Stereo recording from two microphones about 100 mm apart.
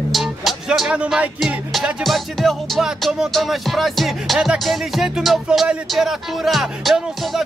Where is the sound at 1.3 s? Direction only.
Centre (ahead or behind).